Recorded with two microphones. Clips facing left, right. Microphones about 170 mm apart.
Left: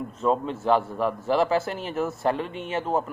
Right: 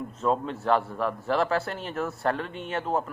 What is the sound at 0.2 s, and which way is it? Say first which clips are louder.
A man's voice: left 2 dB; 5° left (ahead or behind).